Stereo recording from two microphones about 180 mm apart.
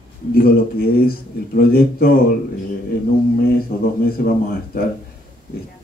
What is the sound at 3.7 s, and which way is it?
Speech, 55° left (ahead or behind).